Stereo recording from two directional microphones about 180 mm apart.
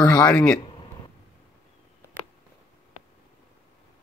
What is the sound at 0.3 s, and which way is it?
Speech, 5° left (ahead or behind).